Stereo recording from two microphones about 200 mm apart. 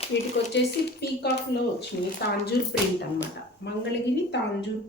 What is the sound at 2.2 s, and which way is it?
Speech, 50° left (ahead or behind).